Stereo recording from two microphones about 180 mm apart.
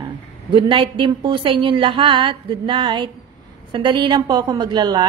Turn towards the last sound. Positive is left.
turn(degrees=-25)  # may be behind; listen again after turning